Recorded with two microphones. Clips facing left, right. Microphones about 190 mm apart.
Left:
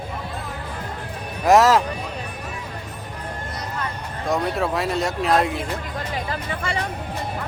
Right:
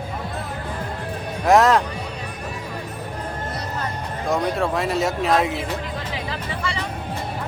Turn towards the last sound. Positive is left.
turn(degrees=50)  # may be behind; listen again after turning